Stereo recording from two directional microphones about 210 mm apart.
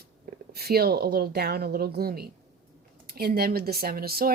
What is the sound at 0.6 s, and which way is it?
Speech, 50° right (ahead or behind).